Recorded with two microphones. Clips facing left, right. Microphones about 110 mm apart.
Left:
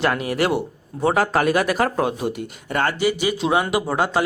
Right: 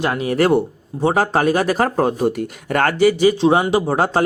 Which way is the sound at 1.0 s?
30° right (ahead or behind).